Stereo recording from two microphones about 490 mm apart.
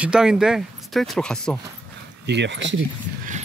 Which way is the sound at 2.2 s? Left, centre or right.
Right.